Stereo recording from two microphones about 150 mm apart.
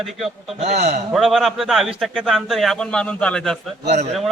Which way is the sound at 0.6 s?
45° right (ahead or behind).